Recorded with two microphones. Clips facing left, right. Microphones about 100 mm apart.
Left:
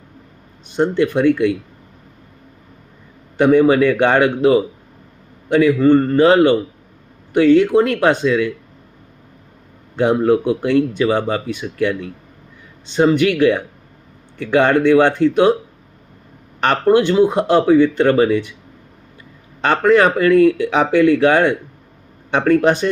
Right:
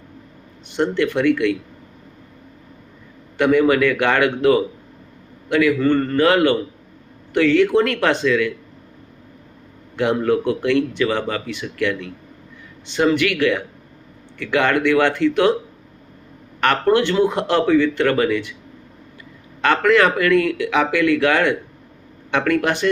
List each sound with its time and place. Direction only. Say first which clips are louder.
0.8 s speech: left 3 dB; 20° left (ahead or behind)
3.3 s speech: left 4 dB; 20° left (ahead or behind)
10.0 s speech: left 4 dB; 20° left (ahead or behind)
16.6 s speech: left 3 dB; 20° left (ahead or behind)
19.6 s speech: left 2 dB; 20° left (ahead or behind)